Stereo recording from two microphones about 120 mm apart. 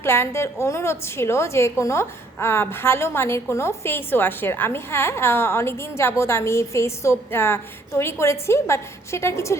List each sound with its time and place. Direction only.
0.0 s a woman's voice: 20° left (ahead or behind)